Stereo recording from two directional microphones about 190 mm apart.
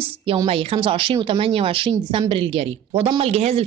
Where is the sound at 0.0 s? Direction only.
30° right (ahead or behind).